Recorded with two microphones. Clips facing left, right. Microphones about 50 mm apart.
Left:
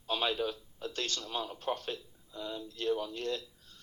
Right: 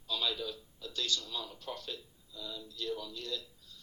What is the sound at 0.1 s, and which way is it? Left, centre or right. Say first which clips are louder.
Speech: left 4 dB; left.